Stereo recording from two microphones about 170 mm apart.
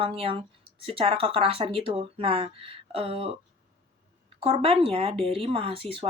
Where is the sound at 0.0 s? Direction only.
30° right (ahead or behind).